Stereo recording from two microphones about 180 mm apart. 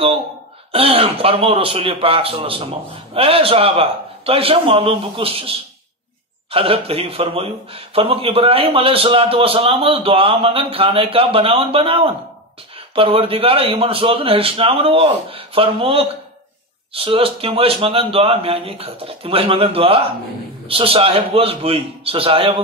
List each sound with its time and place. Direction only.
0.7 s speech: 30° right (ahead or behind)